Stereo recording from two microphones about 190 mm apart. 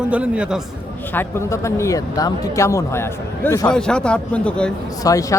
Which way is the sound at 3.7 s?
5° left (ahead or behind).